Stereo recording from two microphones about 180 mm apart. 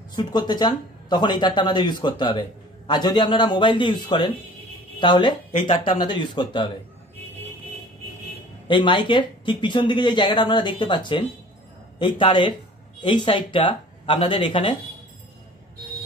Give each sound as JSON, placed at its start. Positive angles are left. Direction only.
{"t": 0.1, "sound": "speech", "side_deg": 25}
{"t": 8.6, "sound": "speech", "side_deg": 25}